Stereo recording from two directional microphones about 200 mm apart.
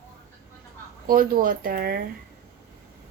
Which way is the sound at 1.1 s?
45° right (ahead or behind).